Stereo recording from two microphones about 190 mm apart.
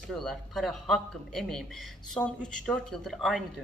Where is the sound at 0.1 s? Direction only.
Centre (ahead or behind).